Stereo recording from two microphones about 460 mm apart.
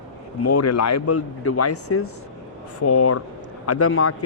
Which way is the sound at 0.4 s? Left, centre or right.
Left.